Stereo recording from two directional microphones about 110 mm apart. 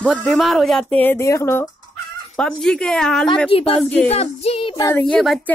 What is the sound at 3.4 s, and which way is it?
Speech, 55° left (ahead or behind).